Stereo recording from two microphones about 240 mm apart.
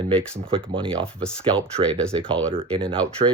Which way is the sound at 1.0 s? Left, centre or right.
Centre.